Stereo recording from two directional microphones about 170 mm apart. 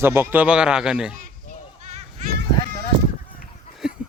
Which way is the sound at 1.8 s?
45° right (ahead or behind).